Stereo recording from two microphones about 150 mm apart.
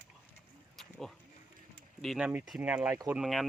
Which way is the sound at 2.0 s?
Centre (ahead or behind).